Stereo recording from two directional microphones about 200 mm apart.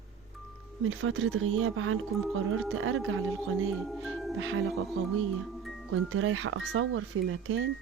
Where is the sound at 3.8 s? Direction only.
Centre (ahead or behind).